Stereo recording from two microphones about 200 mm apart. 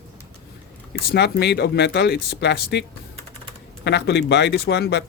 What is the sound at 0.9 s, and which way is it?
Speech, 55° left (ahead or behind).